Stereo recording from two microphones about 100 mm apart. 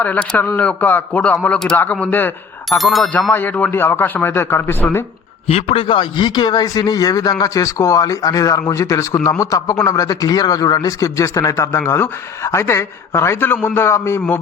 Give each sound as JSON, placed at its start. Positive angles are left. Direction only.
{"t": 0.0, "sound": "a man's voice", "side_deg": 15}
{"t": 2.6, "sound": "speech", "side_deg": 0}
{"t": 3.3, "sound": "speech", "side_deg": 20}
{"t": 5.5, "sound": "a man's voice", "side_deg": 75}